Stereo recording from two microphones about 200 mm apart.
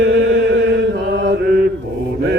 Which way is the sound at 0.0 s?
65° right (ahead or behind).